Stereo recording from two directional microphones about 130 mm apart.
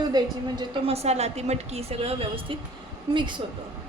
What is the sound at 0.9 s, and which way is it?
A woman's voice, 55° right (ahead or behind).